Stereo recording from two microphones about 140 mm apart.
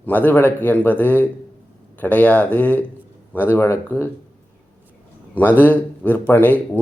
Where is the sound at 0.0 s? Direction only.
10° left (ahead or behind).